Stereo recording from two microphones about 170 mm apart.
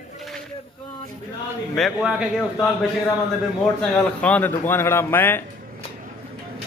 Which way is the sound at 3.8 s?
5° left (ahead or behind).